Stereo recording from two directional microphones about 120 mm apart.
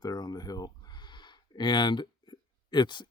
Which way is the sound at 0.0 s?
35° left (ahead or behind).